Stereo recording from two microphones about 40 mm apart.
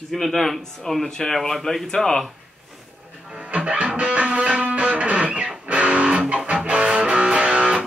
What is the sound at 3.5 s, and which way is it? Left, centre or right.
Music, right.